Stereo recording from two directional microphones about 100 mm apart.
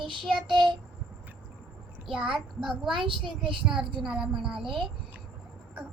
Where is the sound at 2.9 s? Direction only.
55° right (ahead or behind).